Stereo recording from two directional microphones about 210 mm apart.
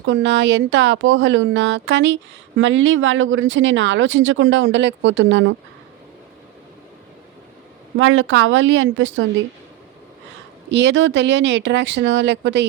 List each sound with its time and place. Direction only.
0.0 s speech: 60° right (ahead or behind)
7.9 s a woman's voice: 70° right (ahead or behind)
10.7 s speech: 60° right (ahead or behind)